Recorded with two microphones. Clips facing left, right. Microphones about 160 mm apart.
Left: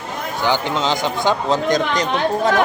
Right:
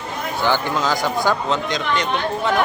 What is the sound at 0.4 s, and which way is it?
Speech, 20° left (ahead or behind).